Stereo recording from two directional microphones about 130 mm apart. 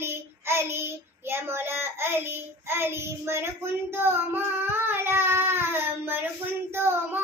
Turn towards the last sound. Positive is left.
turn(degrees=-15)  # may be behind; listen again after turning